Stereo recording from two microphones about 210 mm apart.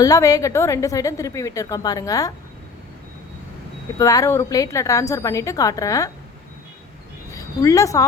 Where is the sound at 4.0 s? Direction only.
15° left (ahead or behind).